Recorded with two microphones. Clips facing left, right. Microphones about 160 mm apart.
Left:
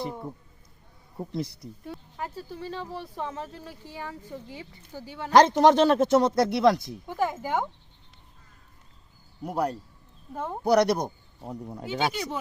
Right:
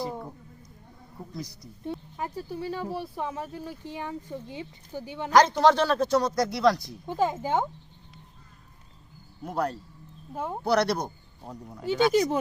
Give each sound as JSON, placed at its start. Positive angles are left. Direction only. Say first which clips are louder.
{"t": 1.3, "sound": "speech", "louder": "left 6 dB", "side_deg": 25}
{"t": 1.8, "sound": "speech", "louder": "right 4 dB", "side_deg": -20}
{"t": 5.3, "sound": "speech", "louder": "left 2 dB", "side_deg": 25}
{"t": 7.0, "sound": "speech", "louder": "right 4 dB", "side_deg": -15}
{"t": 9.4, "sound": "speech", "louder": "left 1 dB", "side_deg": 10}
{"t": 10.3, "sound": "speech", "louder": "even", "side_deg": -5}
{"t": 10.6, "sound": "speech", "louder": "left 3 dB", "side_deg": 15}
{"t": 11.4, "sound": "speech", "louder": "left 4 dB", "side_deg": 30}
{"t": 12.1, "sound": "speech", "louder": "right 10 dB", "side_deg": -40}